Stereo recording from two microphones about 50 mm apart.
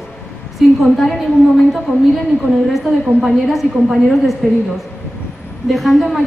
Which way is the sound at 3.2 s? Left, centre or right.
Centre.